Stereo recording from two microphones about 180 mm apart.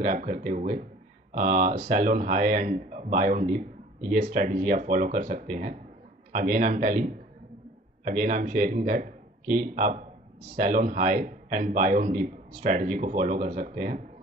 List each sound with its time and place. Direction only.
0.0 s speech: 45° right (ahead or behind)